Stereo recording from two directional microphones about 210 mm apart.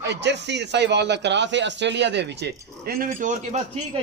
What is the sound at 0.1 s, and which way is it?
Speech, 55° right (ahead or behind).